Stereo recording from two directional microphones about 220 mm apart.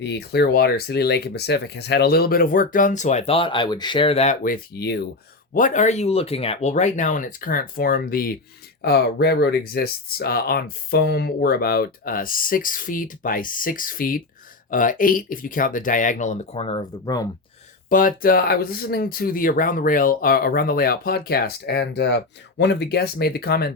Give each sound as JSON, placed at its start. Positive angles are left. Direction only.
{"t": 0.0, "sound": "speech", "side_deg": 50}
{"t": 5.5, "sound": "speech", "side_deg": 35}
{"t": 17.8, "sound": "speech", "side_deg": 40}